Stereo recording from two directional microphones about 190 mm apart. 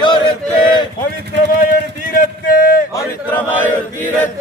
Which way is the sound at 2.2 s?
45° left (ahead or behind).